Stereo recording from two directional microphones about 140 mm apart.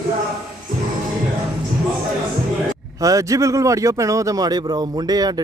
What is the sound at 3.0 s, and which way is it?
A man's voice, 25° right (ahead or behind).